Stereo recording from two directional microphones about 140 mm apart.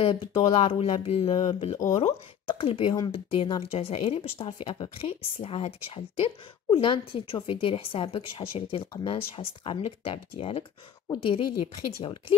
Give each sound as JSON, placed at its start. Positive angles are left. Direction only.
{"t": 0.0, "sound": "a woman's voice", "side_deg": 40}
{"t": 2.6, "sound": "a woman's voice", "side_deg": 40}
{"t": 5.0, "sound": "a woman's voice", "side_deg": 45}